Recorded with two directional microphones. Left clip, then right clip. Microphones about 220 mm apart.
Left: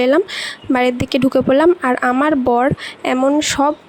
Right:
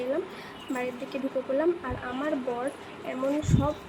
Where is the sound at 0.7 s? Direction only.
50° left (ahead or behind).